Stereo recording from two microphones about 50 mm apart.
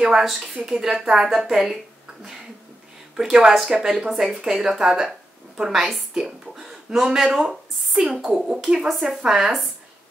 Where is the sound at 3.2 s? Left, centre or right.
Centre.